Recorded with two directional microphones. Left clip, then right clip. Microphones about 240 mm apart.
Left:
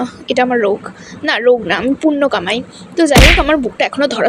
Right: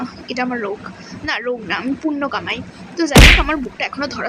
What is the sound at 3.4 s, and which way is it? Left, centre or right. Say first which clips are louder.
Speech: left 7 dB; centre.